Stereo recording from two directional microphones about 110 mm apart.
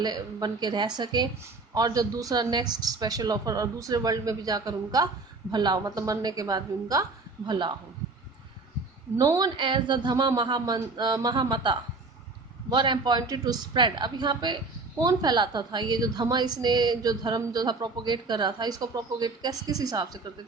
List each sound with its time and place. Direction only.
0.0 s a woman's voice: 40° right (ahead or behind)
9.1 s a woman's voice: 35° right (ahead or behind)